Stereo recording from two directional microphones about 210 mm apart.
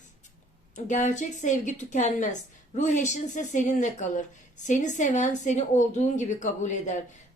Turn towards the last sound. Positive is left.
turn(degrees=35)  # may be behind; listen again after turning